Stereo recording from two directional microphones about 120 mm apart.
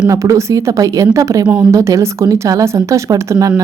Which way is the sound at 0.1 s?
25° right (ahead or behind).